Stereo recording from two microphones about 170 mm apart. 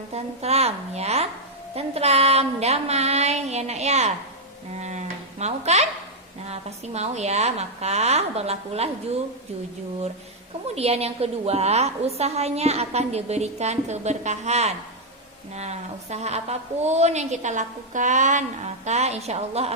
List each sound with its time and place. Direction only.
0.1 s a woman's voice: 40° right (ahead or behind)
4.7 s a sound: 40° right (ahead or behind)
6.5 s a woman's voice: 40° right (ahead or behind)
10.8 s a woman's voice: 35° right (ahead or behind)